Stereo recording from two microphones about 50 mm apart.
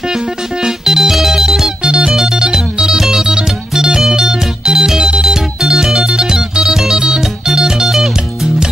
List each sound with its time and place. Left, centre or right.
0.7 s music: centre